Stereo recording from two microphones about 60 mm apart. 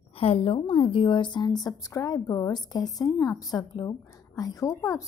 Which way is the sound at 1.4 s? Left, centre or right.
Left.